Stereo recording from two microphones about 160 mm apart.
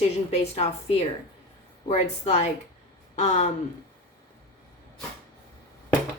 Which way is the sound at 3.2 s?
45° left (ahead or behind).